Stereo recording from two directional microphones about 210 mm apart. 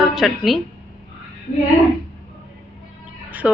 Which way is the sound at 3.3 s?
10° right (ahead or behind).